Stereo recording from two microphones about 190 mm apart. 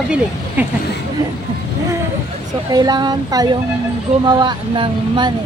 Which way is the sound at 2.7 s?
20° right (ahead or behind).